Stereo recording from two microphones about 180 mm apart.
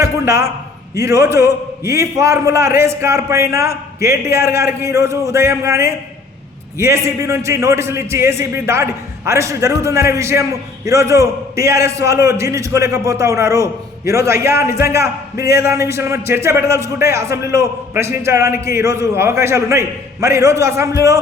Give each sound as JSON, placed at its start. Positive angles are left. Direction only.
{"t": 0.0, "sound": "a man's voice", "side_deg": -15}